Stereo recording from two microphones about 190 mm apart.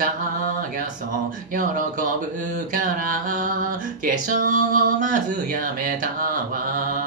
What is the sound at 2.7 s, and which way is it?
Music, 45° right (ahead or behind).